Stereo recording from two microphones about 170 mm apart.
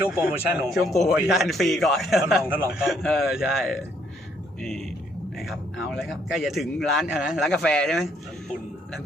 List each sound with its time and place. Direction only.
0.0 s a man's voice: 10° right (ahead or behind)
5.4 s a man's voice: centre (ahead or behind)